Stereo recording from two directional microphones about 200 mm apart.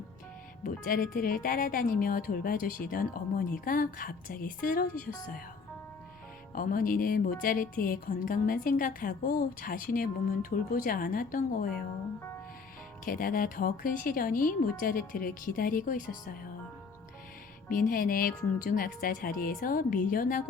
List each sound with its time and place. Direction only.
0.6 s a woman's voice: 45° left (ahead or behind)
6.5 s a woman's voice: 45° left (ahead or behind)
13.1 s a woman's voice: 45° left (ahead or behind)
17.7 s a woman's voice: 45° left (ahead or behind)